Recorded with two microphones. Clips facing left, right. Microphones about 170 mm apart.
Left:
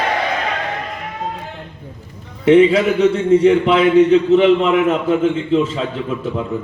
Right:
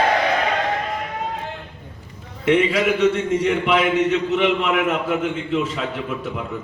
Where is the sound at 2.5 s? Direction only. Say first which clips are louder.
Left 7 dB; 30° left (ahead or behind).